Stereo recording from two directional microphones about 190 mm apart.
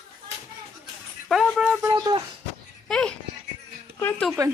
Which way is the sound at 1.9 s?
20° right (ahead or behind).